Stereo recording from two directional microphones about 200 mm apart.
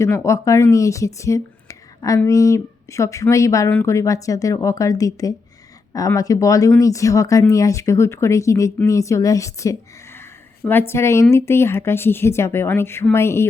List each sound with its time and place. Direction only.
0.0 s speech: 15° left (ahead or behind)